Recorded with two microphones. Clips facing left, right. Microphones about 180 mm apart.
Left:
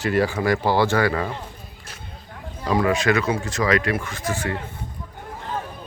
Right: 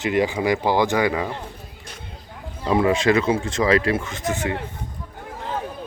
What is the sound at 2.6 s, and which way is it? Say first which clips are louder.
Speech: right 2 dB; 25° right (ahead or behind).